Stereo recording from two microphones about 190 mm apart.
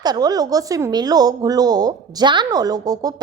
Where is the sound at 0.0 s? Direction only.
20° right (ahead or behind).